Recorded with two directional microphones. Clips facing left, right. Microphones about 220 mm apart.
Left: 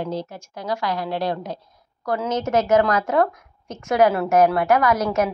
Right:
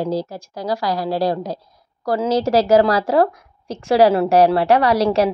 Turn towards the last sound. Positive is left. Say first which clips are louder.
# right 4 dB
turn(degrees=-30)  # may be behind; listen again after turning